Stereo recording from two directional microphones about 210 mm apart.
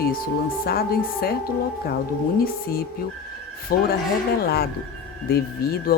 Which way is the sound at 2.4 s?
45° left (ahead or behind).